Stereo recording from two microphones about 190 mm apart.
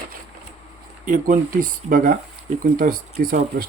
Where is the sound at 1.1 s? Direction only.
45° right (ahead or behind).